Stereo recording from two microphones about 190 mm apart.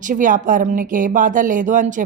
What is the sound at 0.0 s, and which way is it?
Speech, 45° right (ahead or behind).